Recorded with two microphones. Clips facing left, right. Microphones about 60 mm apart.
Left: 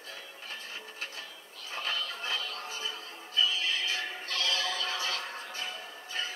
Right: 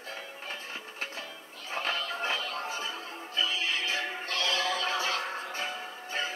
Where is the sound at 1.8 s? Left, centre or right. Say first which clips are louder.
Right 3 dB; right.